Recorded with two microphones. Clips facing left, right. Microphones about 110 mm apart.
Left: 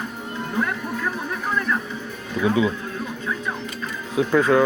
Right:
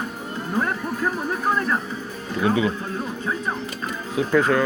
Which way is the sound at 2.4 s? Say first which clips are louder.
Left 1 dB; centre (ahead or behind).